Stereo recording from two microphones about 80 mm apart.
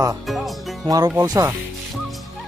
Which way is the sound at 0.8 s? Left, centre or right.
Right.